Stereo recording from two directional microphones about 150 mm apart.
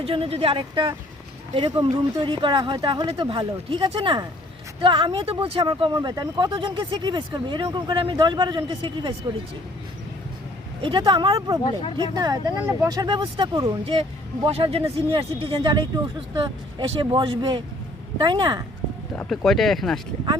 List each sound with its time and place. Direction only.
0.0 s speech: 40° right (ahead or behind)
5.9 s speech: 25° right (ahead or behind)
10.8 s speech: 30° right (ahead or behind)
19.1 s speech: 5° left (ahead or behind)